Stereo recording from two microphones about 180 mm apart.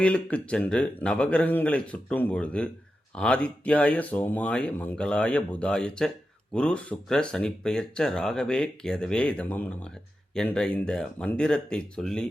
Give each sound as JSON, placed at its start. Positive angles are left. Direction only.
{"t": 0.0, "sound": "speech", "side_deg": 5}